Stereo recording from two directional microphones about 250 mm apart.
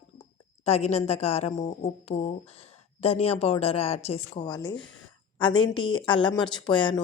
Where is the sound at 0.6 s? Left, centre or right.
Left.